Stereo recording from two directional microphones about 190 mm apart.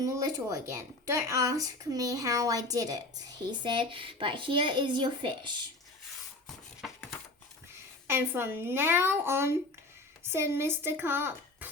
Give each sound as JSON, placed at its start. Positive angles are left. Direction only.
{"t": 0.0, "sound": "speech", "side_deg": -20}
{"t": 8.0, "sound": "speech", "side_deg": -10}